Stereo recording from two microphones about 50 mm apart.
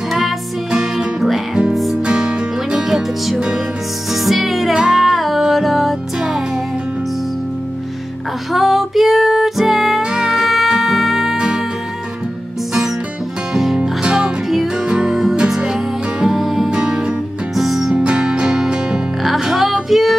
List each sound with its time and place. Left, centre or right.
0.7 s music: centre
1.2 s music: centre
2.0 s music: centre
6.1 s music: centre
8.5 s music: centre
11.3 s music: centre
13.5 s music: centre
16.7 s music: centre
17.6 s music: centre
17.9 s music: centre